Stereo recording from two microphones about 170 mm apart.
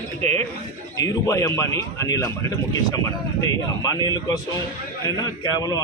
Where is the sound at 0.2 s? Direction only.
40° right (ahead or behind).